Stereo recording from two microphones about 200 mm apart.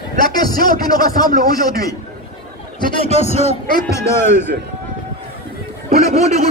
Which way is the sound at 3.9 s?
15° left (ahead or behind).